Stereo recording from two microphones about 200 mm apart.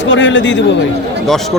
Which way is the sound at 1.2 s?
Centre (ahead or behind).